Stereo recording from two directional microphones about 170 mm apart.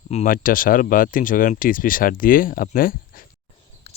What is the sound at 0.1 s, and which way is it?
Speech, 50° left (ahead or behind).